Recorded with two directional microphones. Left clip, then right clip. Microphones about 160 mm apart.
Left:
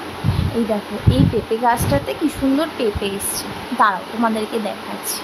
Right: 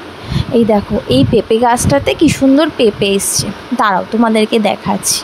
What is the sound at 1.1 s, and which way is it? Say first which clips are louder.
Speech: right 9 dB; 55° right (ahead or behind).